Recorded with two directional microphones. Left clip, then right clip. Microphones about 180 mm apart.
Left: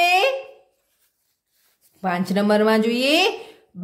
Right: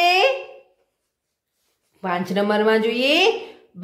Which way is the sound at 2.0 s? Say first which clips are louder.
Even; 35° left (ahead or behind).